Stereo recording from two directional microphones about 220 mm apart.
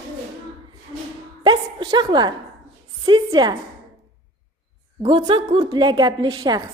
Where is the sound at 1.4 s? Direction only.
20° right (ahead or behind).